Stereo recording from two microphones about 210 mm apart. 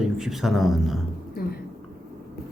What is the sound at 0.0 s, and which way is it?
Speech, centre (ahead or behind).